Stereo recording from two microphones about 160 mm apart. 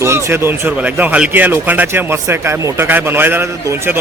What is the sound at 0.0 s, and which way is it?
Speech, 15° right (ahead or behind).